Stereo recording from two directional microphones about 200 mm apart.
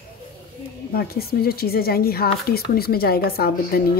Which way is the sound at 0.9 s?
50° left (ahead or behind).